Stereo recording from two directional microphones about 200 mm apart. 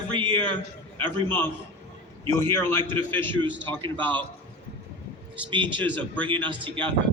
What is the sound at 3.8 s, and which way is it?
Speech, 25° right (ahead or behind).